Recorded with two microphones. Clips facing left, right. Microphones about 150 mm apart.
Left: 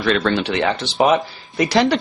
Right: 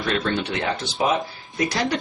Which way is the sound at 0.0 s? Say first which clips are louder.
Left 5 dB; 90° left.